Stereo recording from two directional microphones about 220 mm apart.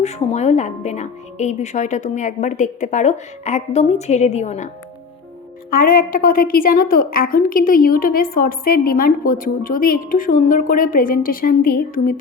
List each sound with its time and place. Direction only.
0.0 s a woman's voice: 30° left (ahead or behind)
5.7 s a woman's voice: 40° left (ahead or behind)